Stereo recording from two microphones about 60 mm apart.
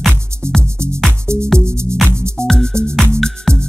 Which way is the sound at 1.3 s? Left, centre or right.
Right.